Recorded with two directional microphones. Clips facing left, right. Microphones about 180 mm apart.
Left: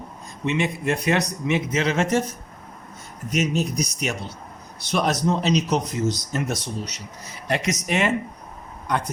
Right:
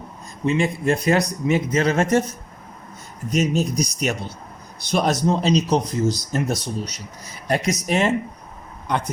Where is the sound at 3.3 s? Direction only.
40° right (ahead or behind).